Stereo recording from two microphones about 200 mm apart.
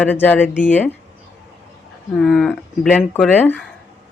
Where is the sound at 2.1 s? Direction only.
Centre (ahead or behind).